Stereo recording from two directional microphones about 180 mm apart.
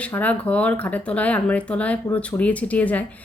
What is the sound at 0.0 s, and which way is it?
A woman's voice, 10° left (ahead or behind).